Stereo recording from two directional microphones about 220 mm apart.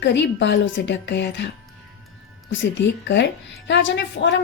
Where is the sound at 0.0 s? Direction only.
50° left (ahead or behind).